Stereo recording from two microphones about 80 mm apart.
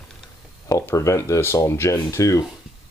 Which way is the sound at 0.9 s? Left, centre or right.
Left.